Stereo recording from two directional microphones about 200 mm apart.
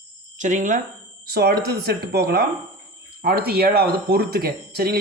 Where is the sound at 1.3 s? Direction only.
50° right (ahead or behind).